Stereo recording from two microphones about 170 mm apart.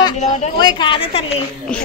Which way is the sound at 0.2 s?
45° left (ahead or behind).